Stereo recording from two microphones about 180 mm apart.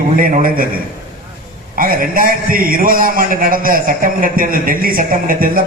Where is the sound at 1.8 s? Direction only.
50° right (ahead or behind).